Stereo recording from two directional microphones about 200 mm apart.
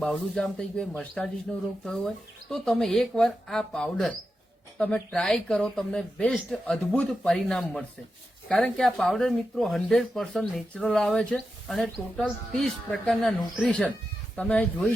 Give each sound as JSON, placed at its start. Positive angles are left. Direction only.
{"t": 0.0, "sound": "speech", "side_deg": 5}